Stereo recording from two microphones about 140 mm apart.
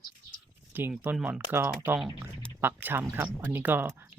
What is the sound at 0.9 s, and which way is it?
Speech, 10° right (ahead or behind).